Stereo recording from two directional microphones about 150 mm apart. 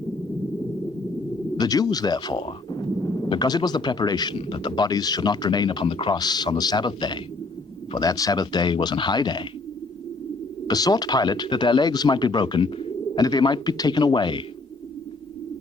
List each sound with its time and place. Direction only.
1.5 s speech: 25° left (ahead or behind)
10.7 s speech: 25° left (ahead or behind)